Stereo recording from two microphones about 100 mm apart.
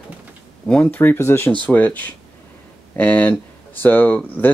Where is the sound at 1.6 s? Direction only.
15° left (ahead or behind).